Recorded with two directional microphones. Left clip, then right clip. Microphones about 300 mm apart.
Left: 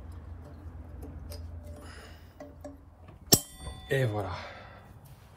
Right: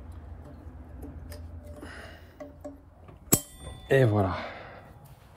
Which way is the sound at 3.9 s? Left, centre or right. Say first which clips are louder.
Right 7 dB; right.